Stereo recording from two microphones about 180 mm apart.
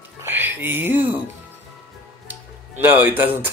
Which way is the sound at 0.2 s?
10° right (ahead or behind).